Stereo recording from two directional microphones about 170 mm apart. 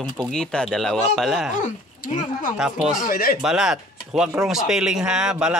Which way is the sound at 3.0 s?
60° left (ahead or behind).